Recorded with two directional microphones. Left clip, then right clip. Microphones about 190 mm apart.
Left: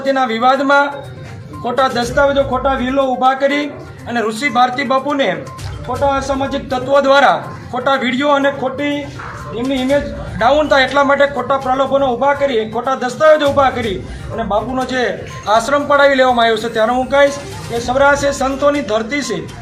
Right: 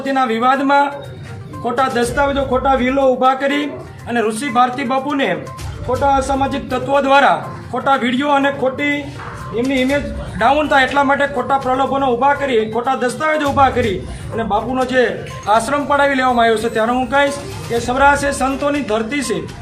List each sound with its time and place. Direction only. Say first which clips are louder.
0.0 s a man's voice: left 2 dB; 5° right (ahead or behind)